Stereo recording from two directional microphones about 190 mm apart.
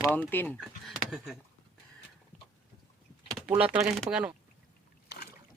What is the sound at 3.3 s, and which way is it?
Speech, 5° right (ahead or behind).